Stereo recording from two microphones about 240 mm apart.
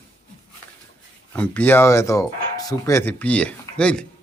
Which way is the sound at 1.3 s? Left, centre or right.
Centre.